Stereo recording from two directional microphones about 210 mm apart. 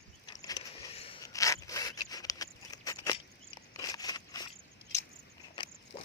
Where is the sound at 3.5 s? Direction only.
20° left (ahead or behind).